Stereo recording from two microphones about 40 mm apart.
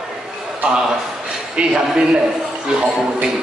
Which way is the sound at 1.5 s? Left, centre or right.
Centre.